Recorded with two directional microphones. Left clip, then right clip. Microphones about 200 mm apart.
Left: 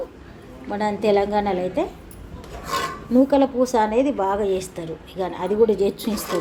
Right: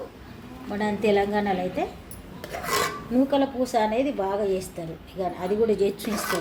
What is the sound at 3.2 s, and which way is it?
A woman's voice, 20° left (ahead or behind).